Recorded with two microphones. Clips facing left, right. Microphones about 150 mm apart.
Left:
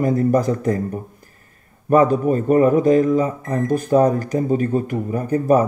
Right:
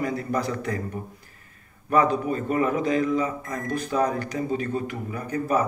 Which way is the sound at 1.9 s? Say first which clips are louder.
Left 7 dB; 45° left (ahead or behind).